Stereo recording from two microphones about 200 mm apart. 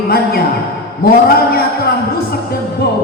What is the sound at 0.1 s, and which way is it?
Music, 50° left (ahead or behind).